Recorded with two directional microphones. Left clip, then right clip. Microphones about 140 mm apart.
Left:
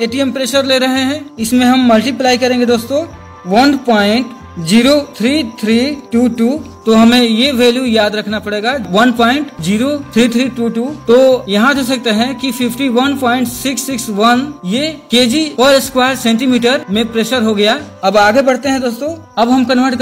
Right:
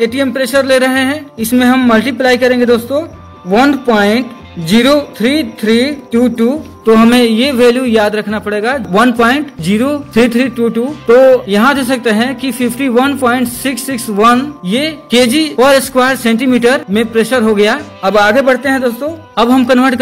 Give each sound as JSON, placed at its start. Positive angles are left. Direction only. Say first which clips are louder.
{"t": 0.0, "sound": "a man's voice", "louder": "right 3 dB", "side_deg": -20}
{"t": 19.3, "sound": "a man's voice", "louder": "right 2 dB", "side_deg": -40}